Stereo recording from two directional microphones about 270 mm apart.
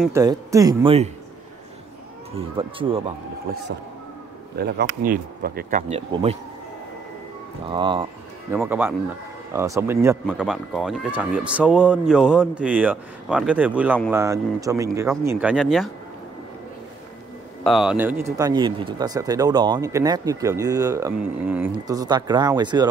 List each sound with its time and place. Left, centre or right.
0.0 s speech: centre
2.3 s speech: centre
4.6 s speech: right
7.6 s speech: centre
8.5 s speech: centre
17.6 s speech: centre